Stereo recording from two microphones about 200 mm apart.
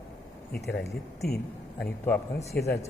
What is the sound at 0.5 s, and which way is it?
Speech, 55° left (ahead or behind).